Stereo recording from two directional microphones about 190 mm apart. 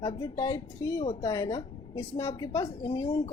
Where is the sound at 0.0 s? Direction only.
20° left (ahead or behind).